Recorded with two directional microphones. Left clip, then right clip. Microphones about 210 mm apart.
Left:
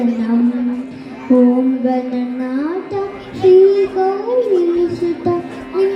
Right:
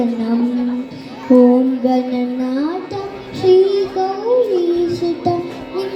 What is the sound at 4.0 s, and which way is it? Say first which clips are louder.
Child singing: left 3 dB; 50° right (ahead or behind).